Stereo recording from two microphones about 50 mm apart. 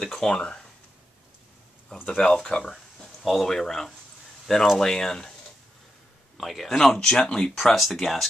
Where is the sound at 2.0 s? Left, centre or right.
Centre.